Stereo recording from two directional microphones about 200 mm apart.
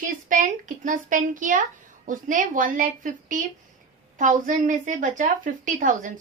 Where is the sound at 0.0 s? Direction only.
40° right (ahead or behind).